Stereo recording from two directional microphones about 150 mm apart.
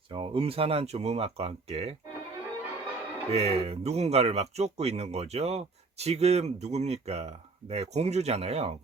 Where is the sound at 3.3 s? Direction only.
45° right (ahead or behind).